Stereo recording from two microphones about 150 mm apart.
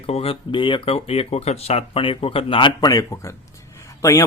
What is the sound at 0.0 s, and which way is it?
Speech, 40° left (ahead or behind).